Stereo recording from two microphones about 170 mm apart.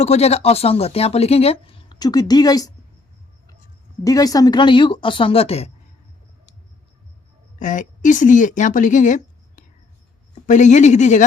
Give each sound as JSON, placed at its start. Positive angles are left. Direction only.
{"t": 0.0, "sound": "speech", "side_deg": 40}
{"t": 4.0, "sound": "speech", "side_deg": 20}
{"t": 7.6, "sound": "a woman's voice", "side_deg": 50}